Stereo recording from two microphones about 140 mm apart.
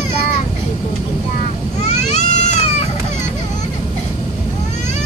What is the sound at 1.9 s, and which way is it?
Baby cry, 55° left (ahead or behind).